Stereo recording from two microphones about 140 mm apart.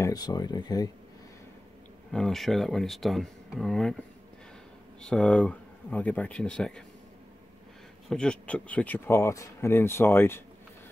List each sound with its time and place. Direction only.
0.0 s speech: 30° left (ahead or behind)
2.0 s speech: 5° left (ahead or behind)
5.0 s speech: 5° left (ahead or behind)
8.1 s speech: 5° left (ahead or behind)